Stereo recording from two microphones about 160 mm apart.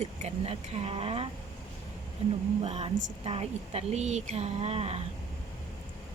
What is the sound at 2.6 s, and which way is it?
Speech, 40° right (ahead or behind).